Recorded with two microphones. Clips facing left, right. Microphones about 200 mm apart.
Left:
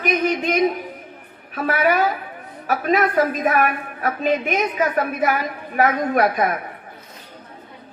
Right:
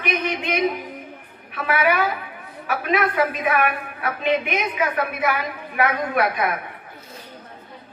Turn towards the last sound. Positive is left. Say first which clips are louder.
# left 3 dB
turn(degrees=45)  # may be behind; listen again after turning